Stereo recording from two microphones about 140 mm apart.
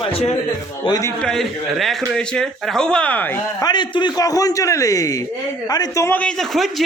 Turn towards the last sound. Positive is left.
turn(degrees=0)  # may be behind; listen again after turning